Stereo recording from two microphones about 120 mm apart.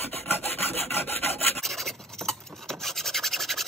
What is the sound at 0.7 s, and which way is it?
Rub, 60° right (ahead or behind).